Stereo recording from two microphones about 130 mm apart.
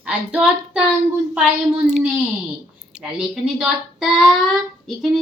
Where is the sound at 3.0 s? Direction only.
5° right (ahead or behind).